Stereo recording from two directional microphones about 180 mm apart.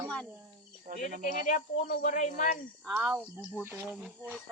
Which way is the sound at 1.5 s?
50° left (ahead or behind).